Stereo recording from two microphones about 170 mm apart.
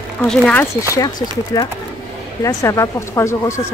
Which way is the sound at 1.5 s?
20° left (ahead or behind).